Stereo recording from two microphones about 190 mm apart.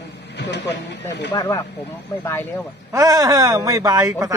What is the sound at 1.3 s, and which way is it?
Speech, 15° left (ahead or behind).